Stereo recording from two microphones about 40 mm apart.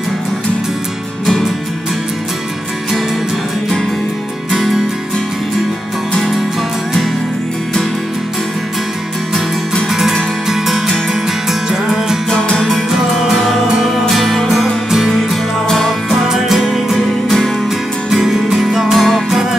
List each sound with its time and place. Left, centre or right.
4.6 s music: centre
9.8 s music: centre
11.7 s music: centre
12.3 s music: left
14.0 s music: centre
16.1 s music: centre
17.6 s music: centre